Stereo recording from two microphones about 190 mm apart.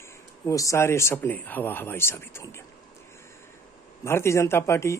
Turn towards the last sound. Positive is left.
turn(degrees=15)  # may be behind; listen again after turning